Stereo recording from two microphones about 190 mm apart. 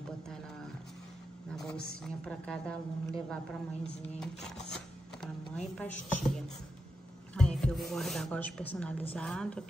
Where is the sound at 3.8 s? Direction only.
Centre (ahead or behind).